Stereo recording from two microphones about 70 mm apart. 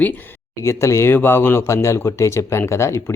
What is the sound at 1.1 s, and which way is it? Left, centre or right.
Speech, left.